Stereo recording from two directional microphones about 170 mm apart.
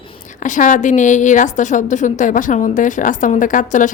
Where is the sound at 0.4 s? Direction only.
50° left (ahead or behind).